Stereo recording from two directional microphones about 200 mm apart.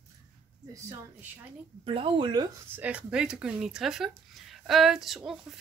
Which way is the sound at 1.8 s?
25° right (ahead or behind).